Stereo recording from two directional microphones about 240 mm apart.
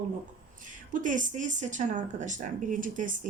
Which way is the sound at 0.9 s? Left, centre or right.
Right.